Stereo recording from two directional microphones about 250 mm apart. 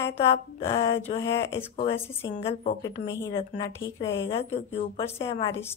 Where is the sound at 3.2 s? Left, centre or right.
Centre.